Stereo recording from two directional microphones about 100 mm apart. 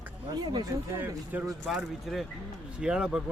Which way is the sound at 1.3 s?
15° right (ahead or behind).